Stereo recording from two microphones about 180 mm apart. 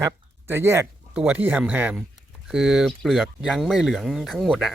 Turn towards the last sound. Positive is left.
turn(degrees=5)  # may be behind; listen again after turning